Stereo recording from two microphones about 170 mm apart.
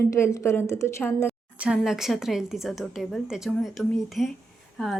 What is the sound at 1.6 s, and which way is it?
A woman's voice, 5° right (ahead or behind).